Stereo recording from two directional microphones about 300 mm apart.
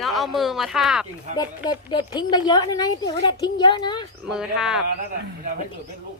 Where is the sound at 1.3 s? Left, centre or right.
Centre.